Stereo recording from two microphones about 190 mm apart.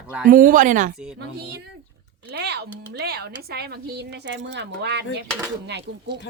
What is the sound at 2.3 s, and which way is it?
Speech, 60° right (ahead or behind).